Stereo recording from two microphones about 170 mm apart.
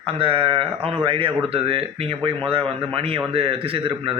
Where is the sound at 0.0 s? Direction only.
35° right (ahead or behind).